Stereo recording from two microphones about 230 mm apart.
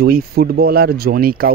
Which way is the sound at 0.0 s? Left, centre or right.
Right.